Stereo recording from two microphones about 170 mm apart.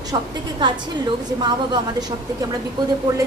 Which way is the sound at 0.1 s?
25° right (ahead or behind).